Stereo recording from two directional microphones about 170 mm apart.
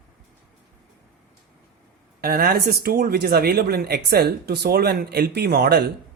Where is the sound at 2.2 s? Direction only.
60° right (ahead or behind).